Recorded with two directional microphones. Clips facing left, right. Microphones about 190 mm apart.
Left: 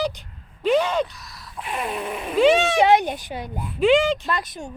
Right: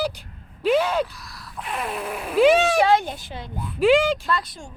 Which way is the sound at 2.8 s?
20° left (ahead or behind).